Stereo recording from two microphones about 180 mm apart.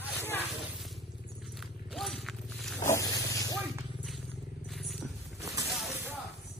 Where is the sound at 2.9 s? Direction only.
20° left (ahead or behind).